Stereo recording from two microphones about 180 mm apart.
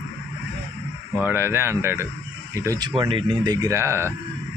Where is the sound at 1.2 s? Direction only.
15° right (ahead or behind).